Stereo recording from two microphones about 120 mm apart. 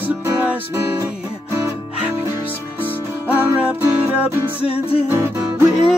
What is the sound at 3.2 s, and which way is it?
Music, 15° right (ahead or behind).